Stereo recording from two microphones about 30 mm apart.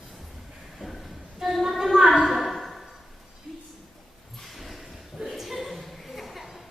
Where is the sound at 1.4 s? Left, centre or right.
Centre.